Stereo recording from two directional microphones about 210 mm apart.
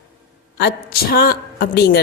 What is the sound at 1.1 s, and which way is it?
Speech, 45° left (ahead or behind).